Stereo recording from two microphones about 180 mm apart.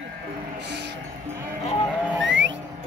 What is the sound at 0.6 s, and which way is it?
Music, 75° right (ahead or behind).